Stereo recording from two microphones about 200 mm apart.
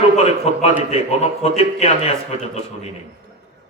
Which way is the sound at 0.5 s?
30° left (ahead or behind).